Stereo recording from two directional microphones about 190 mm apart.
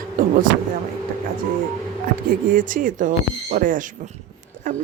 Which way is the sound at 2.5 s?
45° right (ahead or behind).